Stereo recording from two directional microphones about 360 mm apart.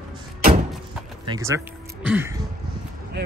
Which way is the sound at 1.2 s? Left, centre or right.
Centre.